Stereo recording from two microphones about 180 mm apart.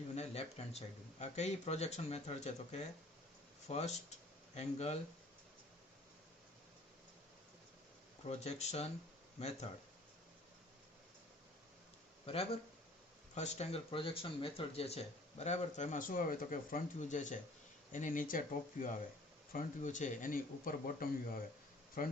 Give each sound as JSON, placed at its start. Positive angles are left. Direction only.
{"t": 0.2, "sound": "speech", "side_deg": 35}
{"t": 8.3, "sound": "speech", "side_deg": 35}
{"t": 12.2, "sound": "speech", "side_deg": 35}